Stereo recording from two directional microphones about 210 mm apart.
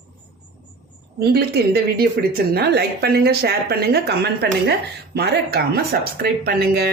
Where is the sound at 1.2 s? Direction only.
50° right (ahead or behind).